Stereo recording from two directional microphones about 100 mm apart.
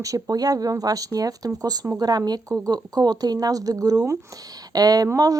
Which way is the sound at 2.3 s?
40° right (ahead or behind).